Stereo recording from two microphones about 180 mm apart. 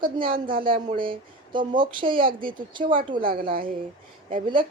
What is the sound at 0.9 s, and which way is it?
Speech, 25° right (ahead or behind).